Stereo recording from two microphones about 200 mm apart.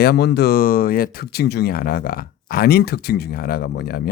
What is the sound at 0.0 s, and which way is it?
Speech, 55° left (ahead or behind).